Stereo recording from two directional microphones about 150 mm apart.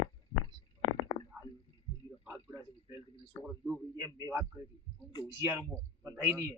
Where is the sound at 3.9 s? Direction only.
20° right (ahead or behind).